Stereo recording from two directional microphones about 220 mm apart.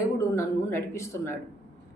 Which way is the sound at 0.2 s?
15° left (ahead or behind).